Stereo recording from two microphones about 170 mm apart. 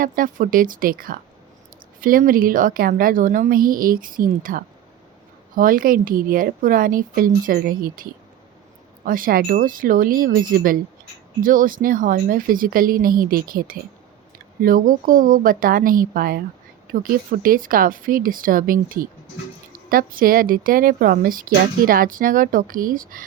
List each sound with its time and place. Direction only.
0.0 s speech: 55° right (ahead or behind)
9.0 s speech: 55° right (ahead or behind)